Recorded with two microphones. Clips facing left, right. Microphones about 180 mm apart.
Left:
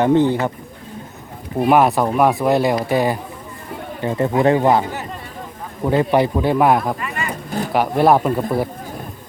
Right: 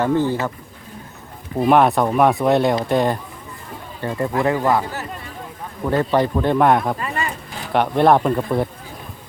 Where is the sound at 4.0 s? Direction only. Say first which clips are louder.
Left 3 dB; 20° left (ahead or behind); by 6.9 s centre (ahead or behind).